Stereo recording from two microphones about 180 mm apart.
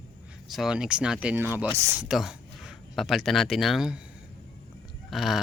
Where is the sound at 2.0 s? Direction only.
5° right (ahead or behind).